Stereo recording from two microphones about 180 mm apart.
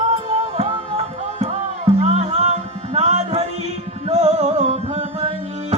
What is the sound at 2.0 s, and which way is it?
Music, 35° right (ahead or behind).